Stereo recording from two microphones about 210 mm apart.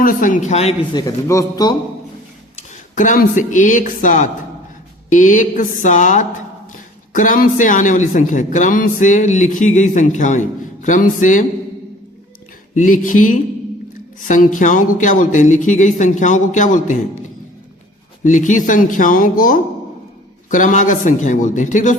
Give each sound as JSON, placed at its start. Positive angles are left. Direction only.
{"t": 0.0, "sound": "a man's voice", "side_deg": 40}
{"t": 1.0, "sound": "a man's voice", "side_deg": 15}
{"t": 2.6, "sound": "a man's voice", "side_deg": 35}
{"t": 12.7, "sound": "a man's voice", "side_deg": 40}
{"t": 18.2, "sound": "a man's voice", "side_deg": 35}